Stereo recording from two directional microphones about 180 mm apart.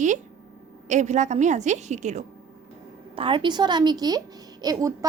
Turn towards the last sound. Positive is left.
turn(degrees=-20)  # may be behind; listen again after turning